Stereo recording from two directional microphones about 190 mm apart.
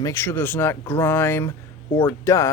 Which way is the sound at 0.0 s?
15° left (ahead or behind).